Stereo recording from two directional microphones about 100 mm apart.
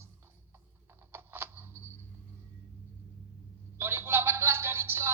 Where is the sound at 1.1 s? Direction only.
20° right (ahead or behind).